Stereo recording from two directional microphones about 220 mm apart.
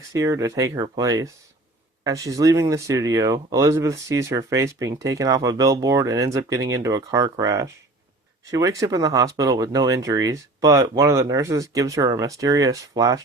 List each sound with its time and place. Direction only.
0.1 s speech: 15° right (ahead or behind)